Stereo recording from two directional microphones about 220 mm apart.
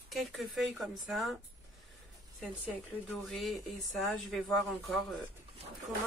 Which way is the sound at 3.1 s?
Centre (ahead or behind).